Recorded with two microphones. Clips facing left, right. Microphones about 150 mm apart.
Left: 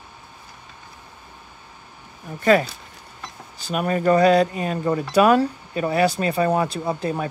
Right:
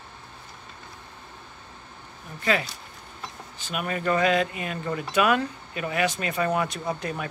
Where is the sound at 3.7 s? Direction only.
40° left (ahead or behind).